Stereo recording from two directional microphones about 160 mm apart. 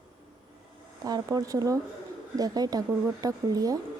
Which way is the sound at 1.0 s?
25° right (ahead or behind).